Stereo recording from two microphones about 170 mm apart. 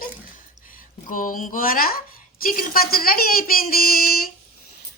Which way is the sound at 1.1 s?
55° left (ahead or behind).